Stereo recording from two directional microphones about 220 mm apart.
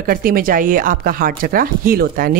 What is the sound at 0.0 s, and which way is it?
Speech, 40° right (ahead or behind).